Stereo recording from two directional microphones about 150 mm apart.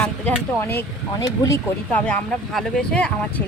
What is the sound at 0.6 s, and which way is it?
Speech, 20° left (ahead or behind).